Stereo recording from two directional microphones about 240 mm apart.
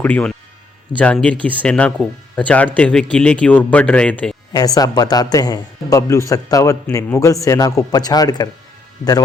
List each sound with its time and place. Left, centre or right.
0.0 s speech: centre
4.5 s a man's voice: centre